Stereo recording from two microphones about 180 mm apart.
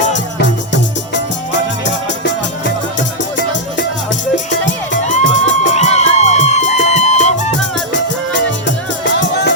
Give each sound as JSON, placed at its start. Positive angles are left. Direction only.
{"t": 0.3, "sound": "music", "side_deg": 75}
{"t": 5.0, "sound": "music", "side_deg": 45}
{"t": 7.9, "sound": "music", "side_deg": 80}